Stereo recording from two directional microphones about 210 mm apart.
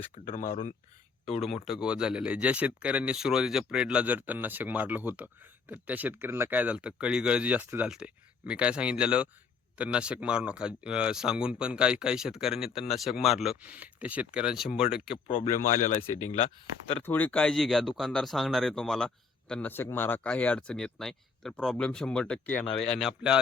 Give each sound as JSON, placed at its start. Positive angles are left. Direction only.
{"t": 0.3, "sound": "speech", "side_deg": 40}
{"t": 1.6, "sound": "speech", "side_deg": -5}
{"t": 15.4, "sound": "speech", "side_deg": 35}
{"t": 16.3, "sound": "speech", "side_deg": 25}
{"t": 17.0, "sound": "speech", "side_deg": 10}